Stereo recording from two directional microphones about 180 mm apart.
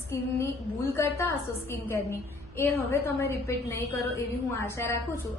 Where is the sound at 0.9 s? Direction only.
15° left (ahead or behind).